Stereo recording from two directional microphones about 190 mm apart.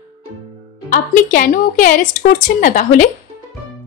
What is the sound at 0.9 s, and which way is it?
A woman's voice, 45° left (ahead or behind).